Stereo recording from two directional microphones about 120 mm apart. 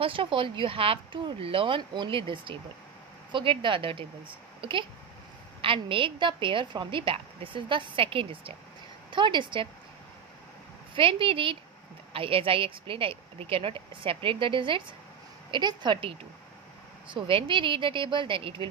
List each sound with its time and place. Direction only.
0.0 s a woman's voice: 45° right (ahead or behind)
11.0 s a woman's voice: 45° right (ahead or behind)